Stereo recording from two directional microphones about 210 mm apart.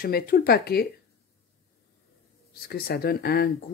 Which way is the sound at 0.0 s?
45° left (ahead or behind).